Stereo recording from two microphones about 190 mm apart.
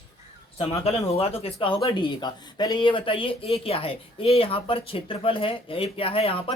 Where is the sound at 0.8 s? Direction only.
30° left (ahead or behind).